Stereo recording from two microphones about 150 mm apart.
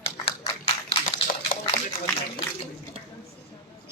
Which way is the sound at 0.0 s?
40° left (ahead or behind).